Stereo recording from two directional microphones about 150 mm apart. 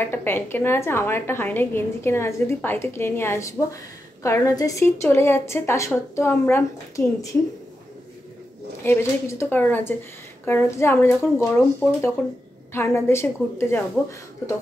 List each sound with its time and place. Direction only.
0.1 s a woman's voice: 15° left (ahead or behind)
8.8 s a woman's voice: 15° left (ahead or behind)